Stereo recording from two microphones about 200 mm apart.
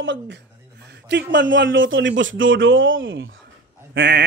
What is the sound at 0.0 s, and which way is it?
Speech, 70° right (ahead or behind).